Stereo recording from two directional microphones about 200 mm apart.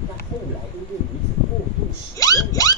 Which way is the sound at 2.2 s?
15° left (ahead or behind).